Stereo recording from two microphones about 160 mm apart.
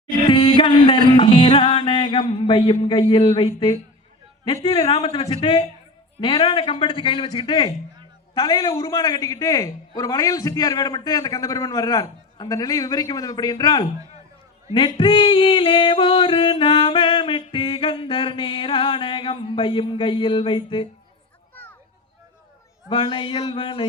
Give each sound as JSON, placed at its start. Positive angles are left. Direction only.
{"t": 0.3, "sound": "music", "side_deg": 30}
{"t": 8.4, "sound": "a man's voice", "side_deg": 25}
{"t": 14.7, "sound": "music", "side_deg": 30}
{"t": 21.5, "sound": "a sound", "side_deg": 10}
{"t": 22.9, "sound": "music", "side_deg": 30}